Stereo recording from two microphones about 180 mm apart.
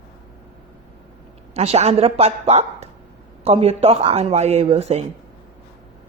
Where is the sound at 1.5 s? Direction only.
35° right (ahead or behind).